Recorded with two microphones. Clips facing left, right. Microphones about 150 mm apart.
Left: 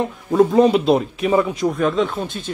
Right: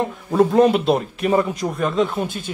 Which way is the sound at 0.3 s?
Centre (ahead or behind).